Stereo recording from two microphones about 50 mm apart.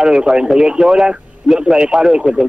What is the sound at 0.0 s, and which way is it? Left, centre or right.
Speech, centre.